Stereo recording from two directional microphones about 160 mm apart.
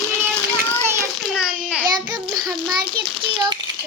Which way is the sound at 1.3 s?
5° right (ahead or behind).